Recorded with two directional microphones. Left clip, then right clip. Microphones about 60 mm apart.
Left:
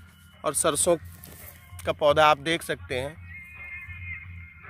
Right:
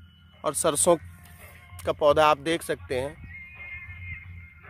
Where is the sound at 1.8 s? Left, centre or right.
Right.